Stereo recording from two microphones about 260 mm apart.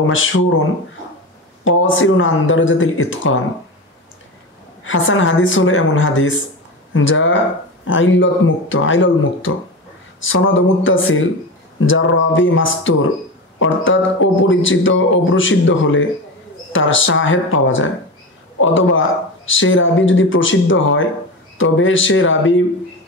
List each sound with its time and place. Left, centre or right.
0.1 s speech: left
4.8 s speech: left